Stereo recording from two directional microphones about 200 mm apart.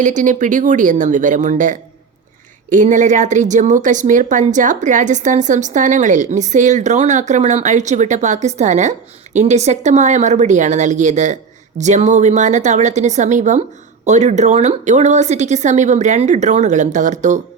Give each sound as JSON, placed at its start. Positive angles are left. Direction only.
{"t": 0.0, "sound": "speech", "side_deg": -40}